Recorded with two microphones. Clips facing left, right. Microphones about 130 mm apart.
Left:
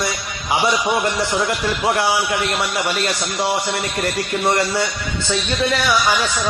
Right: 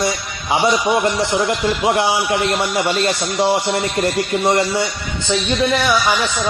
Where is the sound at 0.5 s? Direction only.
25° right (ahead or behind).